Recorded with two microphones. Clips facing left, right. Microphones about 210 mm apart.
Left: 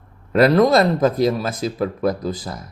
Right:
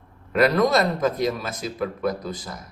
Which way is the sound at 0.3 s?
30° left (ahead or behind).